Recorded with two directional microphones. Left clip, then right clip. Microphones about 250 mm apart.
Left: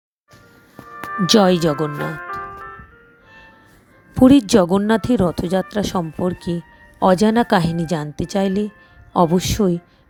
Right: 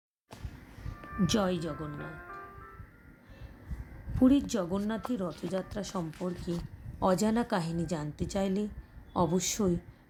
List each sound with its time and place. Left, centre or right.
1.0 s music: left
1.3 s speech: left
4.2 s speech: left